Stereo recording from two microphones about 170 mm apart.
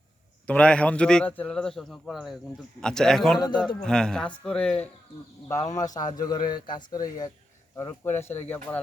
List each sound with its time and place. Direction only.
0.4 s a man's voice: 5° left (ahead or behind)
3.3 s speech: 25° left (ahead or behind)
3.8 s a man's voice: 5° left (ahead or behind)
5.5 s speech: 20° left (ahead or behind)
8.0 s speech: 10° left (ahead or behind)